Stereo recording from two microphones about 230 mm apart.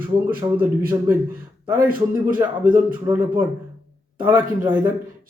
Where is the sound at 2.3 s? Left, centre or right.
Centre.